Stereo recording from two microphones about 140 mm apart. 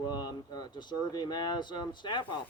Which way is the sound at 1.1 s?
30° left (ahead or behind).